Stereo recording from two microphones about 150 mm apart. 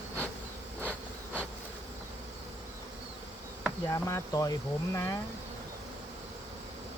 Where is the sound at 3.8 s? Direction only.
20° left (ahead or behind).